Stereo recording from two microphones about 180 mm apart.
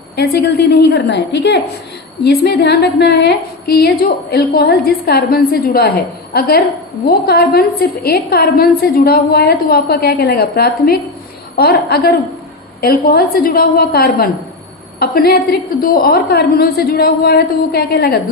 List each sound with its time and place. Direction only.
0.2 s a woman's voice: 65° left (ahead or behind)